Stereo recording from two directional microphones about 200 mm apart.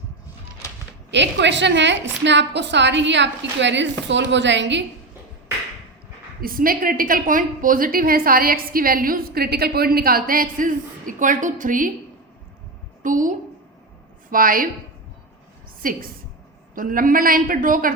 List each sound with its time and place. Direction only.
1.1 s a woman's voice: 60° right (ahead or behind)
6.4 s a woman's voice: 45° right (ahead or behind)
13.0 s a woman's voice: 40° right (ahead or behind)
15.8 s a woman's voice: 45° right (ahead or behind)